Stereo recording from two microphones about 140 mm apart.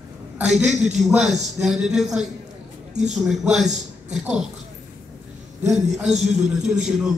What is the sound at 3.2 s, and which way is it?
A man's voice, 5° right (ahead or behind).